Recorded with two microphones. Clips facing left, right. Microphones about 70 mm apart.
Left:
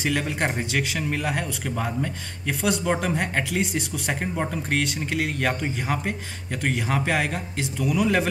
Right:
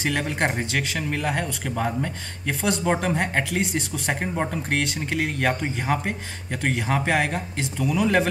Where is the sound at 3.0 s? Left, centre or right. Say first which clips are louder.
Right 1 dB; centre.